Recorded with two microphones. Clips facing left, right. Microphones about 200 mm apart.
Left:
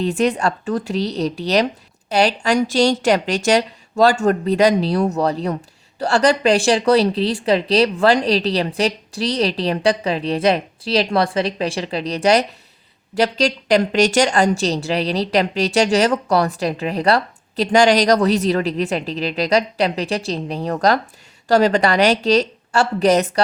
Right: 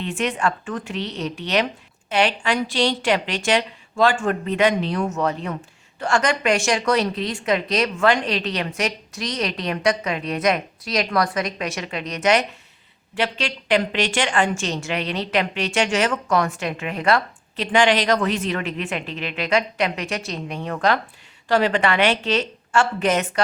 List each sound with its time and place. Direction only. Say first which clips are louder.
0.0 s a woman's voice: left 5 dB; 35° left (ahead or behind)